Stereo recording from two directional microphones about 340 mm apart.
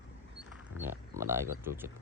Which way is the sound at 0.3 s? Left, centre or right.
Centre.